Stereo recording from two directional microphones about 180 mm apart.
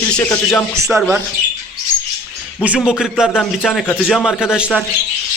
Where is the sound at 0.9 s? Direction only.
5° right (ahead or behind).